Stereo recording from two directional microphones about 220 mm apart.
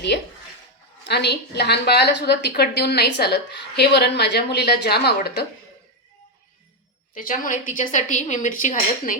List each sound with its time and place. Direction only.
0.1 s a woman's voice: 50° left (ahead or behind)
7.1 s a woman's voice: 40° left (ahead or behind)